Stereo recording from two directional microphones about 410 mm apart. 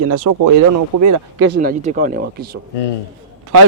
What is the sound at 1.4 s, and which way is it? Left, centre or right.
Speech, right.